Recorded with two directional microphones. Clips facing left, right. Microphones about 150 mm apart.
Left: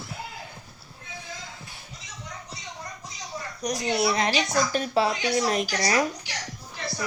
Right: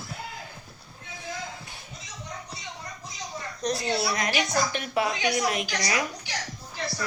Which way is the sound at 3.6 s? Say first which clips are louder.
Left 2 dB; 15° left (ahead or behind).